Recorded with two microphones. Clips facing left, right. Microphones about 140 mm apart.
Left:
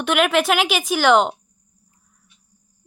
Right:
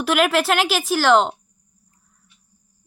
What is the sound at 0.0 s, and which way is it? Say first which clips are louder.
A woman's voice: even; centre (ahead or behind).